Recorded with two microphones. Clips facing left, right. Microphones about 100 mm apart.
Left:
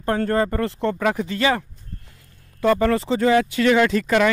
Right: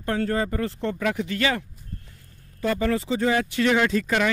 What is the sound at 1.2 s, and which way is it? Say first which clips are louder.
Speech: left 4 dB; 30° left (ahead or behind).